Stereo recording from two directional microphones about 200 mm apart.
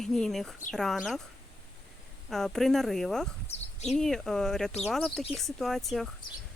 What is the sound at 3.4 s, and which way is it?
Speech, 35° left (ahead or behind).